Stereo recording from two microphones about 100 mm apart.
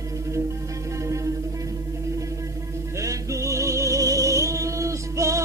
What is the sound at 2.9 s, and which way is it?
Music, 30° right (ahead or behind).